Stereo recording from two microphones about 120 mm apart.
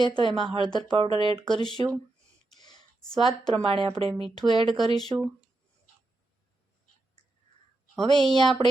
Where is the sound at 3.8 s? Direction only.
50° right (ahead or behind).